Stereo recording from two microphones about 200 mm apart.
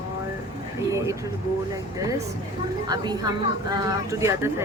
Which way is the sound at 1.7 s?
15° right (ahead or behind).